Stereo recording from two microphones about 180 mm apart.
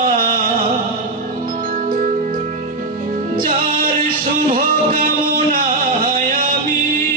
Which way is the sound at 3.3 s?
50° right (ahead or behind).